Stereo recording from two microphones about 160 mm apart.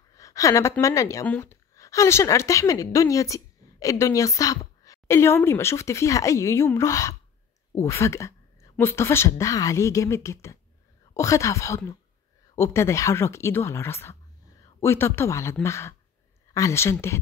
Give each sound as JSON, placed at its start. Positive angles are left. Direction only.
{"t": 0.1, "sound": "a woman's voice", "side_deg": 20}